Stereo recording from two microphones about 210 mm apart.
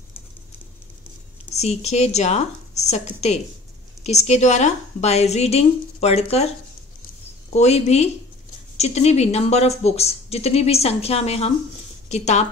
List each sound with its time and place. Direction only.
1.5 s a woman's voice: 30° left (ahead or behind)
7.5 s a woman's voice: 30° left (ahead or behind)